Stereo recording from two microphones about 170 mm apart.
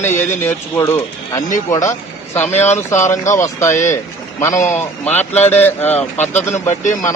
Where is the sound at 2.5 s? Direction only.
40° left (ahead or behind).